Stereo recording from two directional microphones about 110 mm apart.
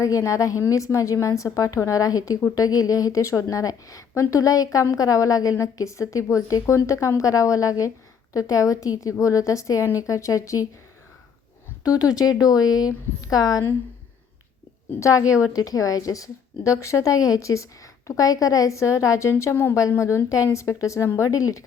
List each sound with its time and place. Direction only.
0.0 s a woman's voice: 30° left (ahead or behind)
11.9 s a woman's voice: 35° left (ahead or behind)
14.9 s a woman's voice: 30° left (ahead or behind)
15.2 s a woman's voice: 10° right (ahead or behind)
15.5 s a woman's voice: 35° left (ahead or behind)